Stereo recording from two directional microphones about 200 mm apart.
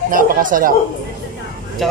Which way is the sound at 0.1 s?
40° right (ahead or behind).